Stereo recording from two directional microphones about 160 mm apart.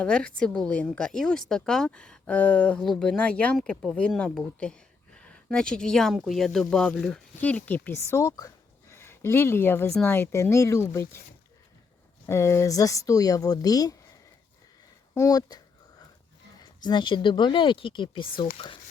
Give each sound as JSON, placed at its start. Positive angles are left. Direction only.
{"t": 0.0, "sound": "a woman's voice", "side_deg": 5}
{"t": 12.2, "sound": "a woman's voice", "side_deg": 15}
{"t": 15.1, "sound": "speech", "side_deg": 20}
{"t": 16.8, "sound": "speech", "side_deg": 30}